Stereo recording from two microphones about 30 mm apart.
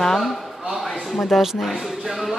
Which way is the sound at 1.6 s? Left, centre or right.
Centre.